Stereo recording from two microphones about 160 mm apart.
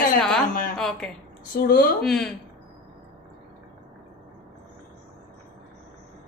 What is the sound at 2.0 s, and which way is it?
Speech, centre (ahead or behind).